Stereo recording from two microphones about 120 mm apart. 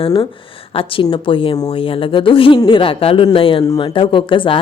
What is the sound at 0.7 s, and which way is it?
A woman's voice, 50° left (ahead or behind).